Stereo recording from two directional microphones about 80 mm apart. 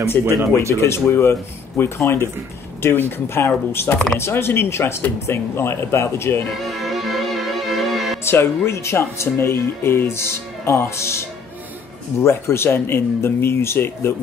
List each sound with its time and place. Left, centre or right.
0.2 s speech: left
0.7 s speech: left
6.6 s music: centre
8.3 s speech: left